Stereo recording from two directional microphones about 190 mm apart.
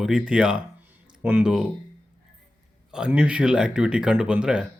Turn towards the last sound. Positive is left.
turn(degrees=-5)  # may be behind; listen again after turning